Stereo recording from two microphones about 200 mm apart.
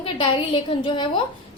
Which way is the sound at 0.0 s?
25° left (ahead or behind).